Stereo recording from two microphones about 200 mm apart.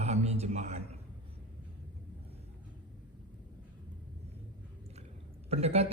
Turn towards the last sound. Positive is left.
turn(degrees=-30)  # may be behind; listen again after turning